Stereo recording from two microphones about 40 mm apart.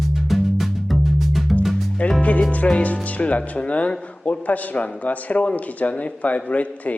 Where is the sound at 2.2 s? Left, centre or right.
Left.